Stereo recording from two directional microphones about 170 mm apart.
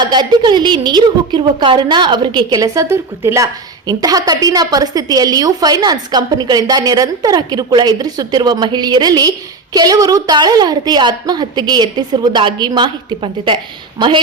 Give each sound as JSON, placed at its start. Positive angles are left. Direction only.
{"t": 0.0, "sound": "a woman's voice", "side_deg": -25}